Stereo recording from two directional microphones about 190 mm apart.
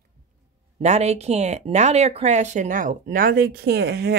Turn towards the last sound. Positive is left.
turn(degrees=-60)  # may be behind; listen again after turning